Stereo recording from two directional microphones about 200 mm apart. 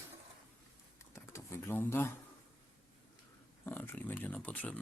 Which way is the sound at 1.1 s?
15° left (ahead or behind).